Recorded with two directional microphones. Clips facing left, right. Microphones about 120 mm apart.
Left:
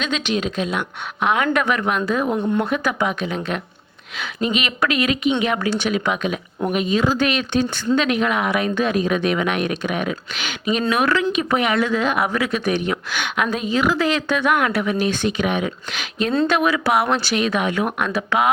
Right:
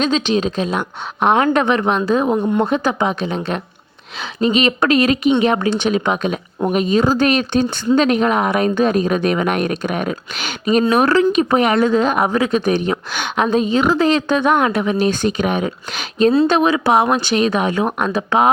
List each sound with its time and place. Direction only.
0.0 s speech: 30° right (ahead or behind); by 2.6 s 15° right (ahead or behind)
2.6 s speech: 25° right (ahead or behind)
5.5 s speech: 25° right (ahead or behind)
17.3 s speech: 35° right (ahead or behind)